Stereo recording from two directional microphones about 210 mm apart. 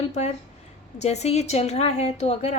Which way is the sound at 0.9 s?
30° left (ahead or behind).